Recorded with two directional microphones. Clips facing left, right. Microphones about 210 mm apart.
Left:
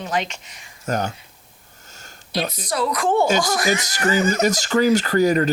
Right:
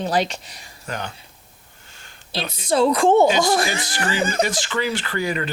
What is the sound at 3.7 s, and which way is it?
A man's voice, 40° left (ahead or behind).